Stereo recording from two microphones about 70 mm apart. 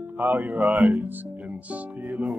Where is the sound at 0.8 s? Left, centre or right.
Centre.